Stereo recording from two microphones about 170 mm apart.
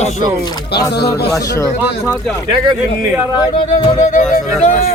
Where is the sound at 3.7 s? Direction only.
45° left (ahead or behind).